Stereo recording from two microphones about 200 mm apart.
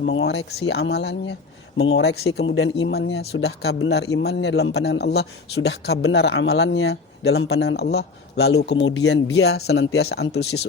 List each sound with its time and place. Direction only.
0.0 s a man's voice: 65° left (ahead or behind)
2.6 s speech: 80° left
2.9 s a man's voice: 55° left (ahead or behind)